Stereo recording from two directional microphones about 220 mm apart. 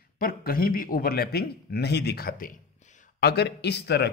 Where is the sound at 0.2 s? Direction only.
40° left (ahead or behind).